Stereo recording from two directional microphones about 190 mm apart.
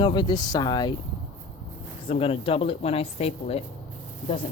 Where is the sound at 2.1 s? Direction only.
30° left (ahead or behind).